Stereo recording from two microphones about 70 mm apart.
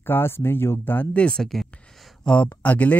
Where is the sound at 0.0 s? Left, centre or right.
Left.